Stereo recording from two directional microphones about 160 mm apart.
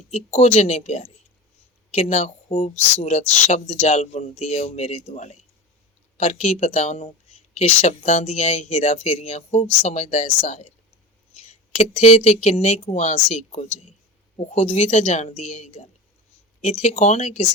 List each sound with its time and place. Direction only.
0.1 s speech: 45° left (ahead or behind)